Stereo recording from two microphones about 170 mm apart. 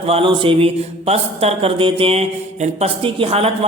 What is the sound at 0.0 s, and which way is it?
Speech, 35° right (ahead or behind).